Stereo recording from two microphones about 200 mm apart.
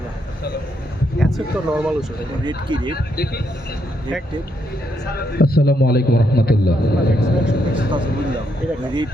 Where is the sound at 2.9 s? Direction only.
50° left (ahead or behind).